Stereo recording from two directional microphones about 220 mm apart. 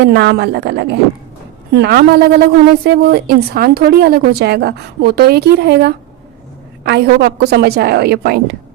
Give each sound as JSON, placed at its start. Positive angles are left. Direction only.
{"t": 0.0, "sound": "a woman's voice", "side_deg": -50}